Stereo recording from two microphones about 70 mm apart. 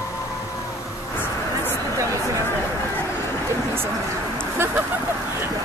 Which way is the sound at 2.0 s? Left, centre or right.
Right.